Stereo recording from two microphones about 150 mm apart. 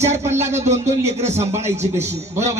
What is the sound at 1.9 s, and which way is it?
Speech, 20° right (ahead or behind).